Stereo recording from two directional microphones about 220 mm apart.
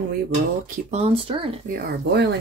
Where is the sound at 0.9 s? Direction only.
25° right (ahead or behind).